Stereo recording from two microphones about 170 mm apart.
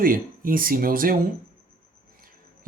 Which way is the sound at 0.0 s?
55° right (ahead or behind).